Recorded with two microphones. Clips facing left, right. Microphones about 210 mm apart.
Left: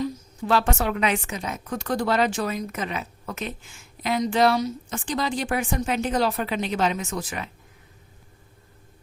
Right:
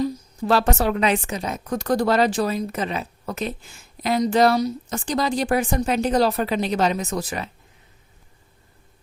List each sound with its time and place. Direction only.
0.0 s a woman's voice: 40° right (ahead or behind)